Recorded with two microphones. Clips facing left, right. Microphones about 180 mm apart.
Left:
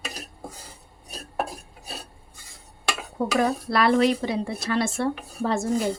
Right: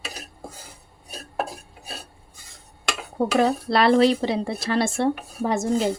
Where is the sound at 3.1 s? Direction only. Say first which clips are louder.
Right 3 dB; 30° right (ahead or behind).